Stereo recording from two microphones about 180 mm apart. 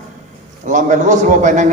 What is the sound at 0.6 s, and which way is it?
A man's voice, 45° right (ahead or behind).